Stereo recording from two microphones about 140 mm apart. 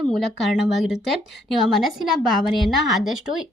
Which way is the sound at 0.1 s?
Centre (ahead or behind).